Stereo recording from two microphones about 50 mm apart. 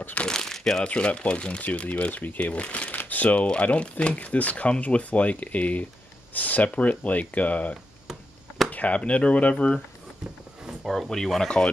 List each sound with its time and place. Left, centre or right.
0.3 s crumpling: centre
0.8 s speech: left
10.9 s speech: centre